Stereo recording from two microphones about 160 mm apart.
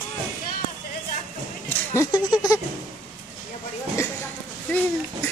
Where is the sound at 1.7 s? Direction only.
15° left (ahead or behind).